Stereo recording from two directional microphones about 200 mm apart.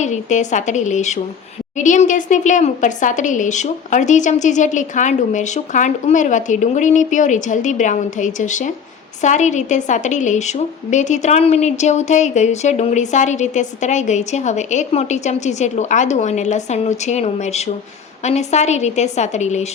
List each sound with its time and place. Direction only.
0.0 s a woman's voice: 35° left (ahead or behind)